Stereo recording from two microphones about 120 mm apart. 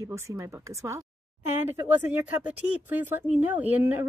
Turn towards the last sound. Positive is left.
turn(degrees=-15)  # may be behind; listen again after turning